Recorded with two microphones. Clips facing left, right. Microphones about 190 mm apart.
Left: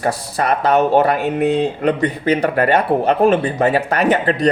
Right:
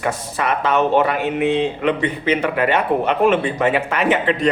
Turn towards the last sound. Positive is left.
turn(degrees=40)  # may be behind; listen again after turning